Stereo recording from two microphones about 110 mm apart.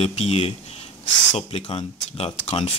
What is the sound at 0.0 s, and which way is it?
Speech, 70° left (ahead or behind).